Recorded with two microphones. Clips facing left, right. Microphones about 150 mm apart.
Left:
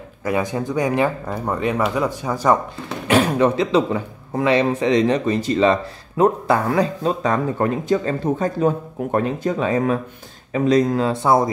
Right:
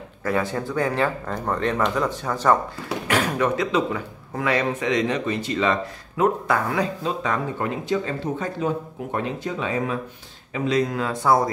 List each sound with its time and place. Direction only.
0.2 s speech: 15° left (ahead or behind)
3.1 s speech: 25° left (ahead or behind)